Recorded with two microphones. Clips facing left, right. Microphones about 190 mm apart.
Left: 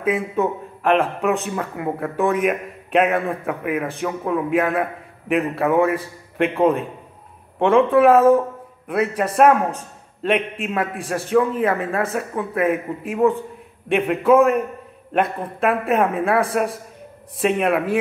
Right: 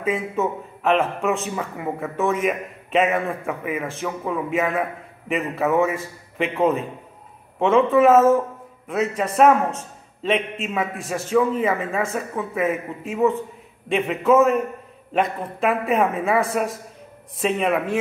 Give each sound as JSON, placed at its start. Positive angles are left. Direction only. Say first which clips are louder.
{"t": 0.0, "sound": "speech", "louder": "left 2 dB", "side_deg": 0}
{"t": 8.8, "sound": "speech", "louder": "left 2 dB", "side_deg": 10}